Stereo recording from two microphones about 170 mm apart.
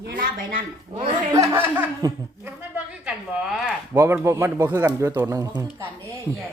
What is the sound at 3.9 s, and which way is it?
Speech, 15° right (ahead or behind).